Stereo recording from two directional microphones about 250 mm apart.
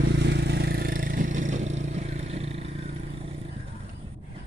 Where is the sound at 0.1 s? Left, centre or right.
Right.